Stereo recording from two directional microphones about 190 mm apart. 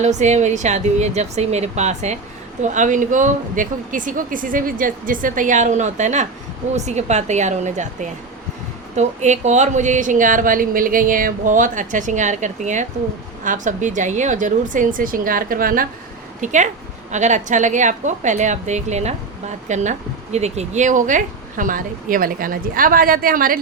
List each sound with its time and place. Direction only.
0.0 s a woman's voice: 40° right (ahead or behind)